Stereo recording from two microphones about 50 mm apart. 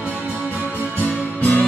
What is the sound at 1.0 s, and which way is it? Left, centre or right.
Music, left.